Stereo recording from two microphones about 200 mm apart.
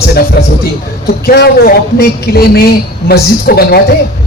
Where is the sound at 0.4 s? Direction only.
50° left (ahead or behind).